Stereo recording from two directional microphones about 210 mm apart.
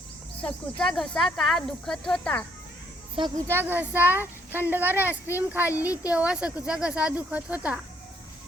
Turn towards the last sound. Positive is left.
turn(degrees=-5)  # may be behind; listen again after turning